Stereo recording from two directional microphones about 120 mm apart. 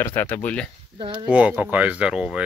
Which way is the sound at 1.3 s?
10° right (ahead or behind).